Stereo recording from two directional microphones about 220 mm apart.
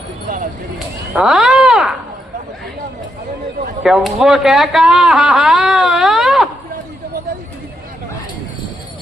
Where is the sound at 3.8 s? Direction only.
Centre (ahead or behind).